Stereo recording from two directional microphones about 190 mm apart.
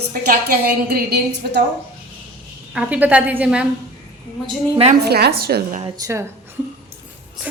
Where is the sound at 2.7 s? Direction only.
5° right (ahead or behind).